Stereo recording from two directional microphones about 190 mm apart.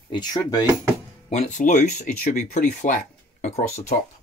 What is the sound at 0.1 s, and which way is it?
Speech, 20° left (ahead or behind).